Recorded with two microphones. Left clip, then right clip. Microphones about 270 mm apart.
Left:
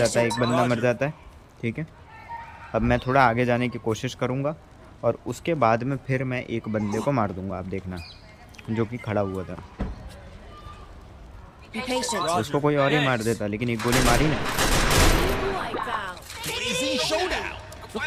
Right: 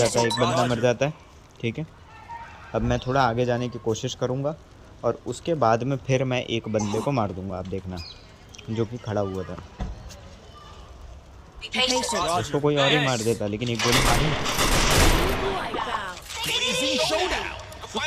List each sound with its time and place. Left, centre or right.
0.0 s speech: centre
9.8 s basketball bounce: right
11.9 s speech: centre
14.5 s fusillade: centre
15.9 s music: centre
16.4 s a sound: centre
16.9 s music: centre